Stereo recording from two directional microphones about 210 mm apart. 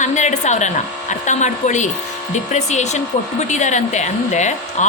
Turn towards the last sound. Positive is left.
turn(degrees=35)  # may be behind; listen again after turning